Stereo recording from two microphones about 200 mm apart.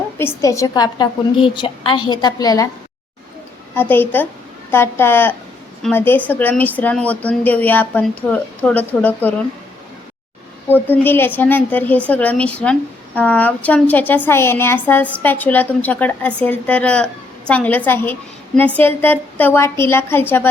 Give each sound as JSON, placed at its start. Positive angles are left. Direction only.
{"t": 0.2, "sound": "a woman's voice", "side_deg": 15}
{"t": 3.8, "sound": "a woman's voice", "side_deg": 10}
{"t": 10.7, "sound": "a woman's voice", "side_deg": 10}